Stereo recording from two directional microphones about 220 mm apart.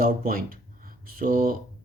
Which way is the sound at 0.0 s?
40° right (ahead or behind).